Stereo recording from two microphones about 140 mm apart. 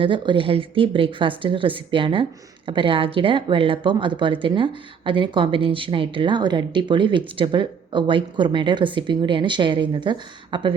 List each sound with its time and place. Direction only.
0.0 s speech: 35° right (ahead or behind)